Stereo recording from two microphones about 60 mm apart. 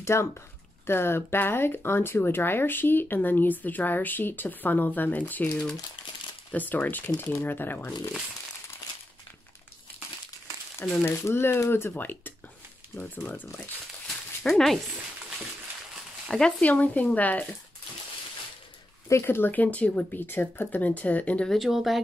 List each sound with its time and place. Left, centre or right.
0.0 s speech: left
6.5 s speech: left
11.0 s speech: left
14.4 s speech: centre
16.3 s speech: centre
16.6 s speech: left
19.2 s speech: left
21.5 s speech: centre